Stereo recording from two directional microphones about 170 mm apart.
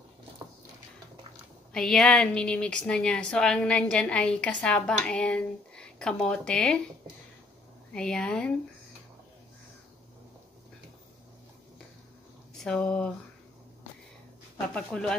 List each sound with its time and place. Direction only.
1.7 s a woman's voice: 5° left (ahead or behind)
7.9 s a woman's voice: 5° left (ahead or behind)
12.6 s a woman's voice: 5° left (ahead or behind)
14.7 s a woman's voice: 5° left (ahead or behind)